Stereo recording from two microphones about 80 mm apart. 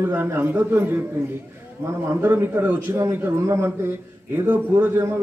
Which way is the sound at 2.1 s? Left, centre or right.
Right.